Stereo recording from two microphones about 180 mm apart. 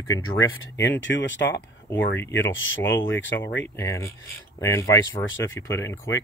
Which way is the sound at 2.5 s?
90° left.